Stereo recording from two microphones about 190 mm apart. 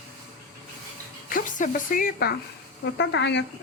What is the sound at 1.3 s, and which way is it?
Speech, 45° left (ahead or behind).